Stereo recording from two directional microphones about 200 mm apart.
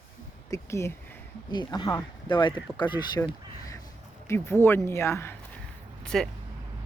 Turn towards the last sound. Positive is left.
turn(degrees=0)  # may be behind; listen again after turning